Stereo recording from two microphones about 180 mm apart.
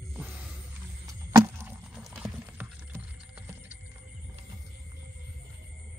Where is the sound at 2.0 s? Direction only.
5° right (ahead or behind).